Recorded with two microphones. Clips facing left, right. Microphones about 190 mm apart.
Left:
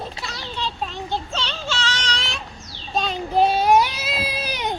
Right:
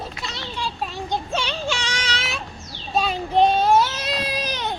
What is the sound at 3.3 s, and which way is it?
Baby cry, 5° left (ahead or behind).